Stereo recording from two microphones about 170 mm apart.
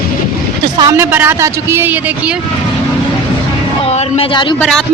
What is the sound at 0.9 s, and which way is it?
A man's voice, 10° right (ahead or behind).